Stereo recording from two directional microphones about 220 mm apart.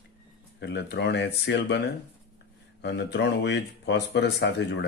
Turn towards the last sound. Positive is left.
turn(degrees=50)  # may be behind; listen again after turning